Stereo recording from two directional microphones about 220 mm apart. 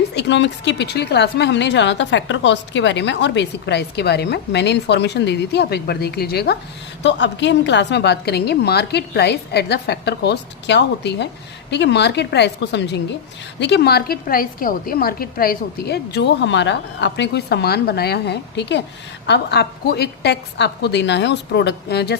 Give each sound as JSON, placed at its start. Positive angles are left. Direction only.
{"t": 0.1, "sound": "a woman's voice", "side_deg": 50}